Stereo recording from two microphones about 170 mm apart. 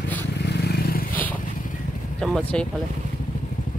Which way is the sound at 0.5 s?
75° left (ahead or behind).